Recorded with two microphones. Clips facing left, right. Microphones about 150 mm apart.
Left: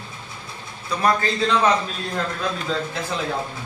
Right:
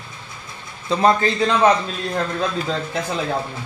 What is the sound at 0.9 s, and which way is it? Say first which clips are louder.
Speech: right 5 dB; 25° right (ahead or behind).